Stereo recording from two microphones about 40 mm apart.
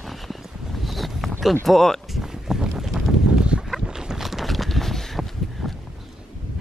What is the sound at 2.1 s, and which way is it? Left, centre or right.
Boat, centre.